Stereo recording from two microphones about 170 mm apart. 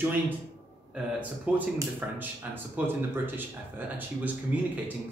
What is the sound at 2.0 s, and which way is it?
Speech, 10° right (ahead or behind).